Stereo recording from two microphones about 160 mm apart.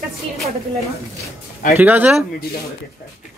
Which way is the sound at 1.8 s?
10° right (ahead or behind).